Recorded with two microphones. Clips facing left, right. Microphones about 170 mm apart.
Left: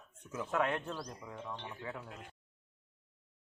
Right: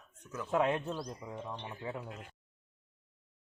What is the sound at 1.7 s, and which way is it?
Speech, 25° right (ahead or behind).